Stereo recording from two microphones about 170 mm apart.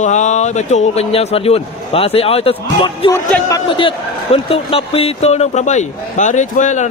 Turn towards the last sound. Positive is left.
turn(degrees=45)  # may be behind; listen again after turning